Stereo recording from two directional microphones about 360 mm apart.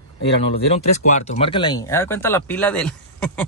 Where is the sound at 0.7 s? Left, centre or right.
Centre.